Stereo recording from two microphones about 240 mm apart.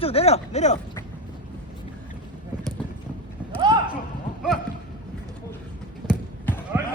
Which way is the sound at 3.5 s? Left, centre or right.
Centre.